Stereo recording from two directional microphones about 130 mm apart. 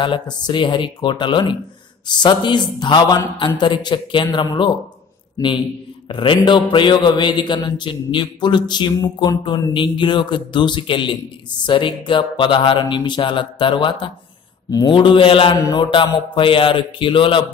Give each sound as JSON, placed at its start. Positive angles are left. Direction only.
{"t": 0.5, "sound": "a man's voice", "side_deg": 40}
{"t": 5.4, "sound": "speech", "side_deg": 25}
{"t": 6.0, "sound": "a man's voice", "side_deg": 40}
{"t": 15.0, "sound": "a man's voice", "side_deg": 40}